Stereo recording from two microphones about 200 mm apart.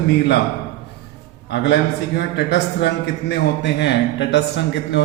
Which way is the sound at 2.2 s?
55° left (ahead or behind).